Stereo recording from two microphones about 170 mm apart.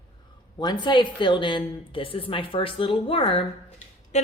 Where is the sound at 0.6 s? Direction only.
25° left (ahead or behind).